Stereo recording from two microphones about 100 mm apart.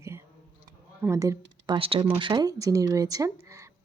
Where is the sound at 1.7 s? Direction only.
65° right (ahead or behind).